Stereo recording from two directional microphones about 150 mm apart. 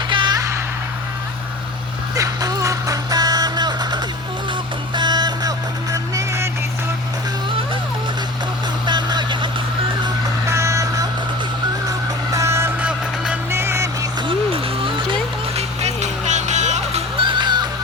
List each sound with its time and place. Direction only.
0.1 s music: 30° right (ahead or behind)
2.1 s music: 25° right (ahead or behind)
8.9 s vehicle: 30° right (ahead or behind)
10.5 s vehicle: 20° right (ahead or behind)
11.9 s music: 20° right (ahead or behind)
14.3 s a sound: 35° right (ahead or behind)
15.5 s music: 50° right (ahead or behind)
17.2 s music: 35° right (ahead or behind)